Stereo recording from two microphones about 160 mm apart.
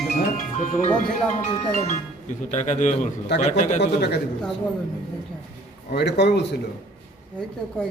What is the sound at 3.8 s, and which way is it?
Speech, 90° left.